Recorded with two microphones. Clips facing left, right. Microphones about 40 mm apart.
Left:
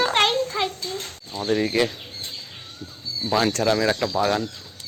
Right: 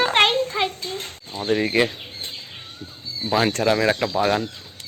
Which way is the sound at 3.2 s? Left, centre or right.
Centre.